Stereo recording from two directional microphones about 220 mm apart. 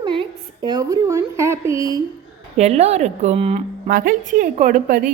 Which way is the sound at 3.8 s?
40° right (ahead or behind).